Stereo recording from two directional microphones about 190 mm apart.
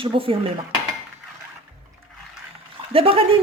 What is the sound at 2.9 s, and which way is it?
Speech, 30° right (ahead or behind).